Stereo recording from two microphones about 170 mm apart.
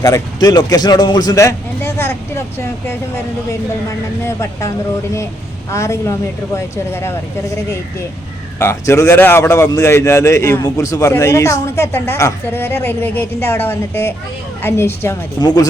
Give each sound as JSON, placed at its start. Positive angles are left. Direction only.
{"t": 0.0, "sound": "a man's voice", "side_deg": 20}
{"t": 5.7, "sound": "a man's voice", "side_deg": 15}